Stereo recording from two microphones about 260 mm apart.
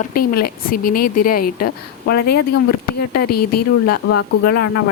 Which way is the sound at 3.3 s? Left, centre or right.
Left.